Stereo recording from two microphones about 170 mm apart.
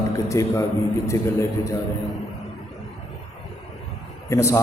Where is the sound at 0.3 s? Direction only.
15° left (ahead or behind).